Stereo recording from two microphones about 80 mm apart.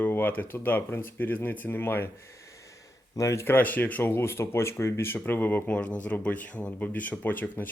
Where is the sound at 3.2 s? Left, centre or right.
Left.